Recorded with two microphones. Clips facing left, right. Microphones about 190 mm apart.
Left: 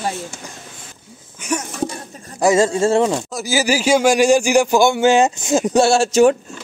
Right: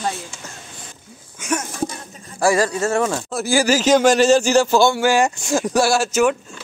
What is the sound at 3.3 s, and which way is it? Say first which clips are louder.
A man's voice: right 1 dB; centre (ahead or behind).